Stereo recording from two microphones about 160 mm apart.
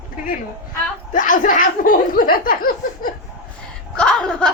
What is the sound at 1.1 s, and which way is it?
Speech, 55° left (ahead or behind).